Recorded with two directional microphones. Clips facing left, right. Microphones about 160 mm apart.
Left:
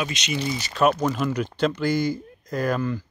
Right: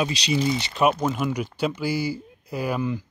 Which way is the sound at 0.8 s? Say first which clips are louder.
Left 2 dB; 10° right (ahead or behind).